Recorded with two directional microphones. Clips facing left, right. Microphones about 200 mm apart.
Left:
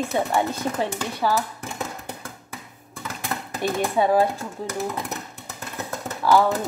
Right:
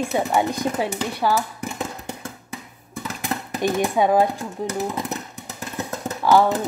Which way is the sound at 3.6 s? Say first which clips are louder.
Right 2 dB; 15° right (ahead or behind).